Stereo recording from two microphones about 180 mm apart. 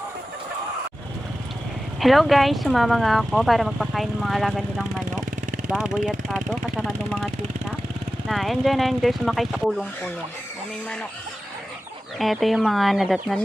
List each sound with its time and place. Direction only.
2.0 s speech: centre (ahead or behind)
8.3 s speech: centre (ahead or behind)
12.2 s speech: centre (ahead or behind)